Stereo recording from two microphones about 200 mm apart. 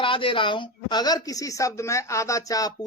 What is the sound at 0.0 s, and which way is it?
A woman's voice, 25° left (ahead or behind).